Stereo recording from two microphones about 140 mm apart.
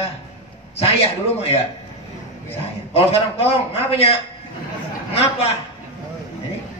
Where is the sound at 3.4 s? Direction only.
45° left (ahead or behind).